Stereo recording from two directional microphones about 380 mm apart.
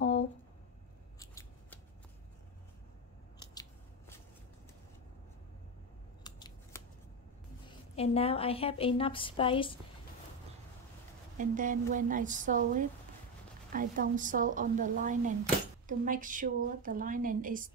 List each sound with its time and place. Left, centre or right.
1.2 s scissors: centre
6.2 s scissors: centre
7.6 s a woman's voice: centre
11.3 s speech: right